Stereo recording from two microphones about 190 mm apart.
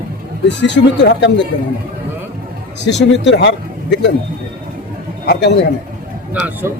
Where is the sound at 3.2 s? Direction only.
65° left (ahead or behind).